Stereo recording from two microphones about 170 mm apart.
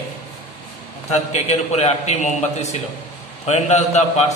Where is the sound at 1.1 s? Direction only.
40° left (ahead or behind).